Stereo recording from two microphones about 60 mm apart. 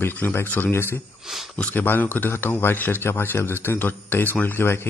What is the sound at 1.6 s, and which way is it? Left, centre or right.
Speech, left.